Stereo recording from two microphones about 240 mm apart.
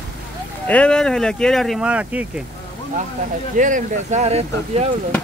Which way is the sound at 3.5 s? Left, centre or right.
Right.